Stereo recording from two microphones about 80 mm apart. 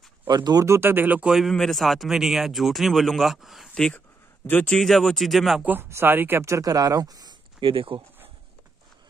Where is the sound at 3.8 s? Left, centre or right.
Centre.